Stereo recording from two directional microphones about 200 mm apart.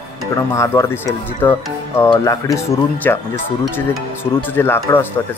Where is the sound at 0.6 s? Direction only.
15° left (ahead or behind).